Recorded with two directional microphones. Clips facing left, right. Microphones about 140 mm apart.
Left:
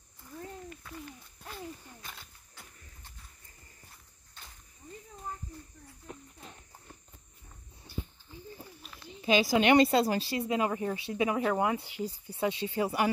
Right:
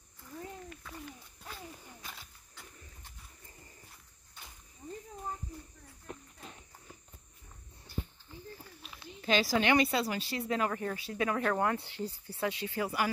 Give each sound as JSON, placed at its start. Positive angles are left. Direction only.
{"t": 0.7, "sound": "a sound", "side_deg": 0}
{"t": 2.0, "sound": "wild animals", "side_deg": -5}
{"t": 8.8, "sound": "a sound", "side_deg": 0}
{"t": 9.2, "sound": "speech", "side_deg": 15}
{"t": 9.8, "sound": "speech", "side_deg": 35}
{"t": 10.3, "sound": "speech", "side_deg": 20}